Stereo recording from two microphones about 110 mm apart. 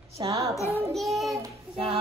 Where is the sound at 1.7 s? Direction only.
60° right (ahead or behind).